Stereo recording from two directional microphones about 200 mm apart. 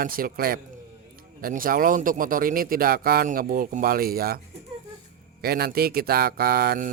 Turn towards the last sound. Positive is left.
turn(degrees=-50)  # may be behind; listen again after turning